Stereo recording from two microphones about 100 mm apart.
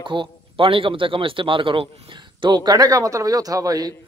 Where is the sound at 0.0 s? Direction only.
55° right (ahead or behind).